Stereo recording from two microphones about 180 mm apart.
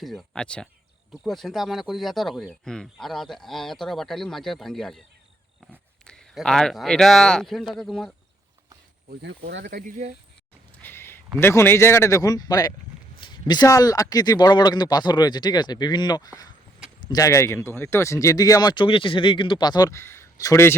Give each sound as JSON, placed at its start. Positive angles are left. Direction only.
{"t": 0.0, "sound": "speech", "side_deg": 0}
{"t": 6.1, "sound": "speech", "side_deg": 5}
{"t": 9.2, "sound": "speech", "side_deg": -75}
{"t": 9.8, "sound": "speech", "side_deg": -40}
{"t": 10.8, "sound": "a sound", "side_deg": 10}
{"t": 11.3, "sound": "speech", "side_deg": 15}